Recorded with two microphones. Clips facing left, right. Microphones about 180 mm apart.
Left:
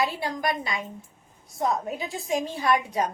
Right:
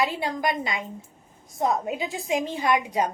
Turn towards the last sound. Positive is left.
turn(degrees=-20)  # may be behind; listen again after turning